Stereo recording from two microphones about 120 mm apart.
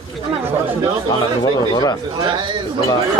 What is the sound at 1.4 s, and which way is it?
Speech, 35° left (ahead or behind).